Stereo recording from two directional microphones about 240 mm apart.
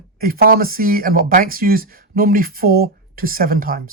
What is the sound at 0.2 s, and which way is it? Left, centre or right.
Speech, right.